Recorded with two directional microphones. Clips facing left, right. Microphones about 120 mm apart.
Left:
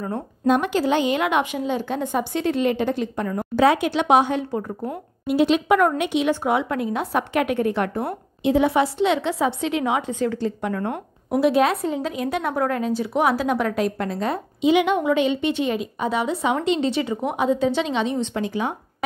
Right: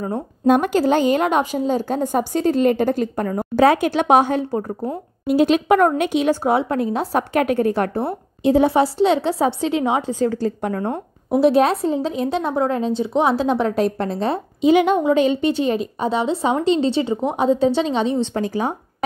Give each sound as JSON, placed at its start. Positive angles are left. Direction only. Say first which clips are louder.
{"t": 0.5, "sound": "a woman's voice", "louder": "right 4 dB", "side_deg": -45}